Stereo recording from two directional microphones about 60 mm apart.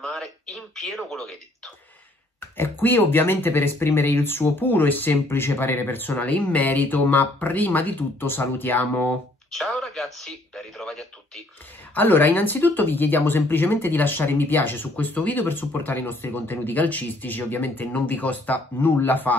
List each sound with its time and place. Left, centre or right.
0.0 s a sound: centre
2.5 s speech: left
9.7 s speech: centre
11.9 s speech: left